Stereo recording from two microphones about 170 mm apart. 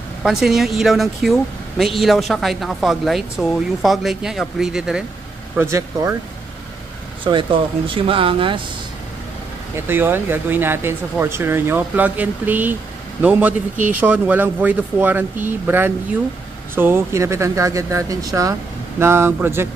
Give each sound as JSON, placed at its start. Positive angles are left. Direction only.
{"t": 0.2, "sound": "speech", "side_deg": -5}
{"t": 5.6, "sound": "speech", "side_deg": -15}
{"t": 7.2, "sound": "speech", "side_deg": -30}
{"t": 9.8, "sound": "speech", "side_deg": -10}